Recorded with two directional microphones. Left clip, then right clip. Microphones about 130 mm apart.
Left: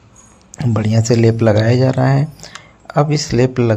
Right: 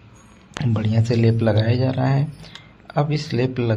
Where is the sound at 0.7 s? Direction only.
40° left (ahead or behind).